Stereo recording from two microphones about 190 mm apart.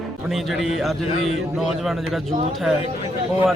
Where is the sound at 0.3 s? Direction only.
Centre (ahead or behind).